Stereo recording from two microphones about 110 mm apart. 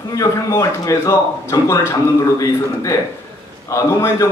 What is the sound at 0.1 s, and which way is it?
A man's voice, 30° left (ahead or behind).